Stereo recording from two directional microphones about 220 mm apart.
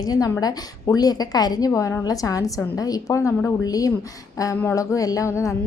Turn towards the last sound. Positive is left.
turn(degrees=15)  # may be behind; listen again after turning